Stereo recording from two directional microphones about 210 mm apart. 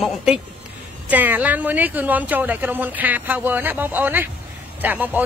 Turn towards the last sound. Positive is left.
turn(degrees=-10)  # may be behind; listen again after turning